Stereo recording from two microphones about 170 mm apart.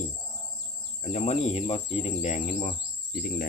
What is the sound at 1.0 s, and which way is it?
Cricket, 40° left (ahead or behind).